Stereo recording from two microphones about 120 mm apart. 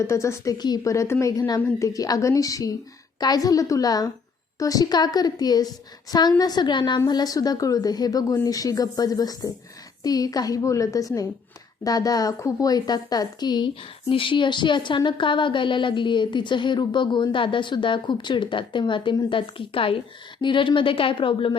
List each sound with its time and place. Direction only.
0.1 s a woman's voice: 25° left (ahead or behind); by 21.5 s 45° left (ahead or behind)